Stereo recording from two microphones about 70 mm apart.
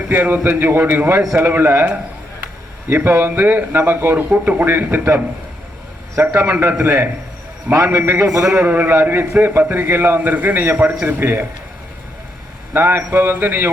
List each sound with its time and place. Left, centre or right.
0.1 s a man's voice: right
2.9 s a man's voice: right
6.2 s a man's voice: right
8.3 s a man's voice: right
8.5 s a man's voice: right
12.7 s a man's voice: right